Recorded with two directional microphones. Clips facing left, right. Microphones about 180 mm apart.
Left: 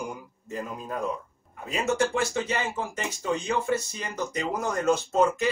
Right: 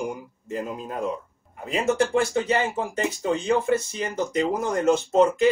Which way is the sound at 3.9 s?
25° right (ahead or behind).